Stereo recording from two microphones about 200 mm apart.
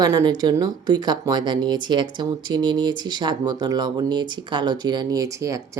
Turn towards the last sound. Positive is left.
turn(degrees=-15)  # may be behind; listen again after turning